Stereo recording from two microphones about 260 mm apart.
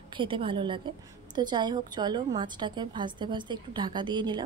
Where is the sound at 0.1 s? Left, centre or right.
Centre.